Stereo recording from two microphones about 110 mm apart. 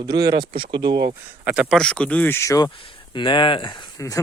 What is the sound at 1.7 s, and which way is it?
Speech, 5° left (ahead or behind).